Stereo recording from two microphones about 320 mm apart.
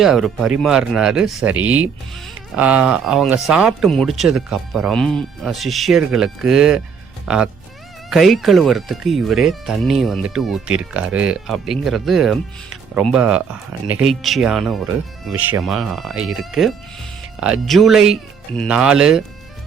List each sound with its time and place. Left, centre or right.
0.0 s speech: centre